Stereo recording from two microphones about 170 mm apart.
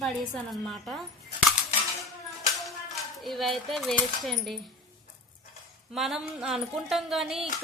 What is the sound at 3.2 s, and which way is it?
Speech, centre (ahead or behind).